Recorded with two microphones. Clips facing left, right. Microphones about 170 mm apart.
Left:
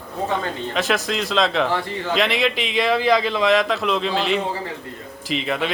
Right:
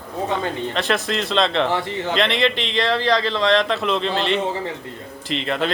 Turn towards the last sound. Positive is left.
turn(degrees=5)  # may be behind; listen again after turning